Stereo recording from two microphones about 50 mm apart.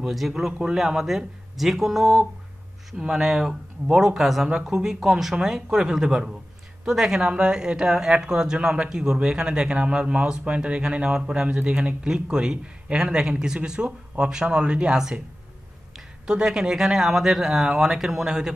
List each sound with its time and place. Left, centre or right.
0.1 s speech: centre
16.3 s speech: centre